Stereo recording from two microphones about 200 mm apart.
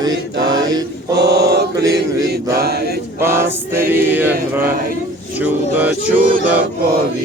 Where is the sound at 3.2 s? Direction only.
10° right (ahead or behind).